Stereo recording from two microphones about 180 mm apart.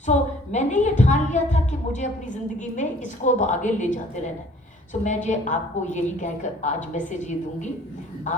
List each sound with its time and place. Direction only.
0.0 s a woman's voice: 40° left (ahead or behind)
5.0 s a woman's voice: 40° left (ahead or behind)